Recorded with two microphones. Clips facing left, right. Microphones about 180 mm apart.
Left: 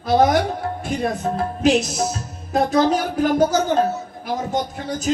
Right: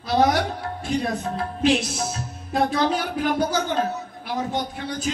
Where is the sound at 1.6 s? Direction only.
45° left (ahead or behind).